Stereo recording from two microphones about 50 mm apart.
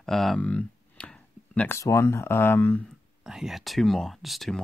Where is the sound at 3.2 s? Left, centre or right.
Centre.